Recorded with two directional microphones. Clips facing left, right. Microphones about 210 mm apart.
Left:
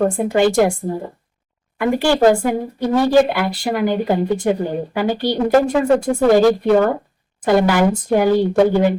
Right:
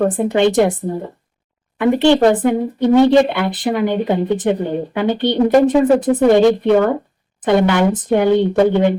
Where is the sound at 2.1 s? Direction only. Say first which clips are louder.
Right 1 dB; centre (ahead or behind).